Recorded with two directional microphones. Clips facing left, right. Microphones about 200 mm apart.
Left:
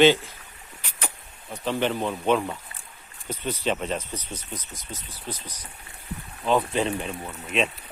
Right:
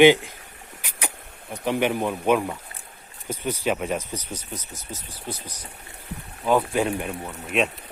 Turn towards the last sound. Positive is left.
turn(degrees=-5)  # may be behind; listen again after turning